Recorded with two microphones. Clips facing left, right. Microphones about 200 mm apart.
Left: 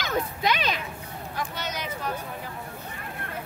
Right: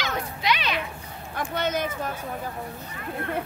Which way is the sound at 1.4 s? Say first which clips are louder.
Right 7 dB; 50° right (ahead or behind).